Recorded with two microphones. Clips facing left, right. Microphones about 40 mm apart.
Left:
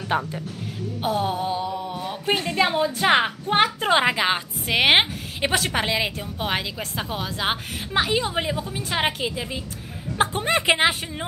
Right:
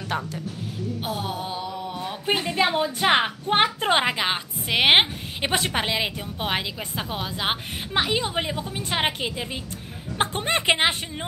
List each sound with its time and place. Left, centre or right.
0.1 s speech: centre
1.0 s a woman's voice: centre
2.0 s music: centre
2.6 s a woman's voice: centre
4.0 s a woman's voice: centre